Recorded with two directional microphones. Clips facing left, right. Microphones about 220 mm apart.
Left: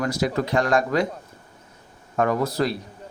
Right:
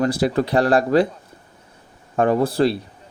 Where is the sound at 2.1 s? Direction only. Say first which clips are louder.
Right 4 dB; 30° right (ahead or behind).